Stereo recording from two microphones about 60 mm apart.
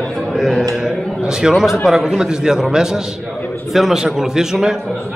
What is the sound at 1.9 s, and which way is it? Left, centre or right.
A man's voice, centre.